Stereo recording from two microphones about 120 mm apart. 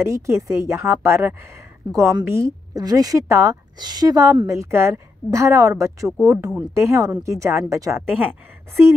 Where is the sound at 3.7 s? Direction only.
35° right (ahead or behind).